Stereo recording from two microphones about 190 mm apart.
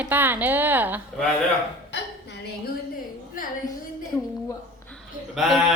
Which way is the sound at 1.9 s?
60° left (ahead or behind).